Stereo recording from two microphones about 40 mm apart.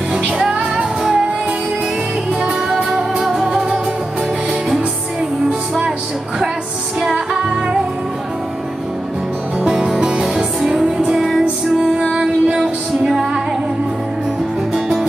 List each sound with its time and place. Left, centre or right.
0.2 s music: right
2.7 s music: centre
9.9 s music: right
10.2 s music: centre
10.8 s music: right
11.1 s music: centre
12.1 s music: right